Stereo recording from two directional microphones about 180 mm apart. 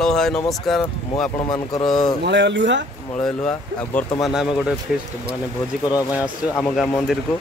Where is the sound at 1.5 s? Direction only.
20° left (ahead or behind).